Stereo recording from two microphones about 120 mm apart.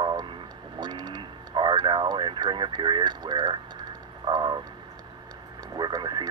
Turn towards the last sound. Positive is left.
turn(degrees=-35)  # may be behind; listen again after turning